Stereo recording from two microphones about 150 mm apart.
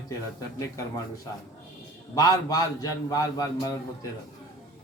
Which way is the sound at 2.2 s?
25° left (ahead or behind).